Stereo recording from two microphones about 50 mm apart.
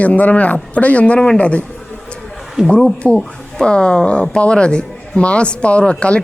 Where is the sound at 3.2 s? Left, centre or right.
Centre.